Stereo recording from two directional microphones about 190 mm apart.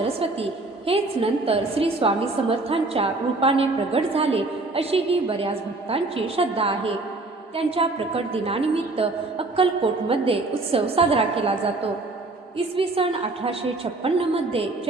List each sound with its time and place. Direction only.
0.9 s a woman's voice: 30° right (ahead or behind)